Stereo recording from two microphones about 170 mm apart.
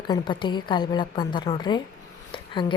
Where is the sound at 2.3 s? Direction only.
30° left (ahead or behind).